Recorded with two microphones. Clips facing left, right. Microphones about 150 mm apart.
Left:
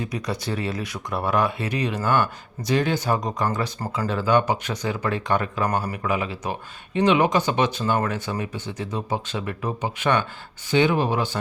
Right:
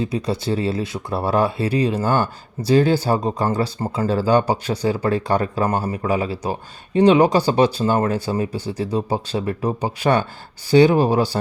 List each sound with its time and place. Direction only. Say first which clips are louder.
0.0 s speech: right 6 dB; 30° right (ahead or behind)